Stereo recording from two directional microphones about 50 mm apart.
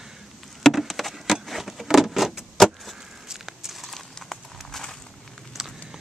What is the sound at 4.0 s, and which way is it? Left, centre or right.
Horse, centre.